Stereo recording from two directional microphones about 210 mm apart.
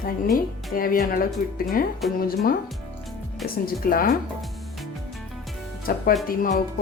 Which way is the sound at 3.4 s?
45° left (ahead or behind).